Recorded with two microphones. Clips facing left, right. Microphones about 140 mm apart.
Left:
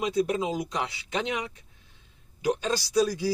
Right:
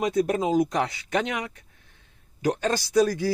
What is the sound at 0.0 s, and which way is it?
Speech, 50° right (ahead or behind).